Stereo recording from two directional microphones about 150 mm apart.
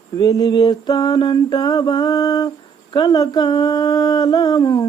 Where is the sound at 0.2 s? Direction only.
25° left (ahead or behind).